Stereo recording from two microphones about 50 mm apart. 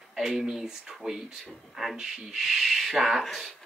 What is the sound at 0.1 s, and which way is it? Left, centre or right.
Speech, centre.